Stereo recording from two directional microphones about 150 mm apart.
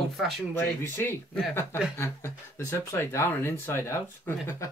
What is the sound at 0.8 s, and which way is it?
Speech, 15° left (ahead or behind).